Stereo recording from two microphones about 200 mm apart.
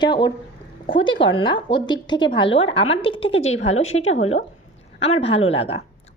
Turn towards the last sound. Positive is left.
turn(degrees=30)  # may be behind; listen again after turning